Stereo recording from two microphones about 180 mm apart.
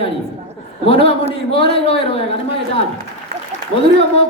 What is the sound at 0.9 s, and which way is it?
Speech, 30° left (ahead or behind).